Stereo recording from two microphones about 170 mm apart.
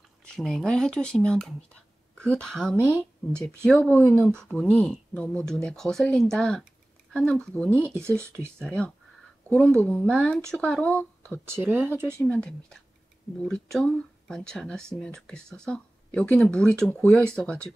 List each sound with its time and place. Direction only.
0.3 s speech: centre (ahead or behind)
7.8 s speech: 15° right (ahead or behind)
8.6 s speech: 5° left (ahead or behind)
11.3 s speech: 10° right (ahead or behind)
12.1 s speech: 5° left (ahead or behind)